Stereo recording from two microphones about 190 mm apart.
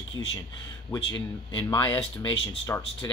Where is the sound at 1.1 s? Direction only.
25° left (ahead or behind).